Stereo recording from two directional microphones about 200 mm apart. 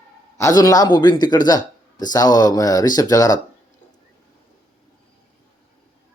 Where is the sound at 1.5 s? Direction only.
20° left (ahead or behind).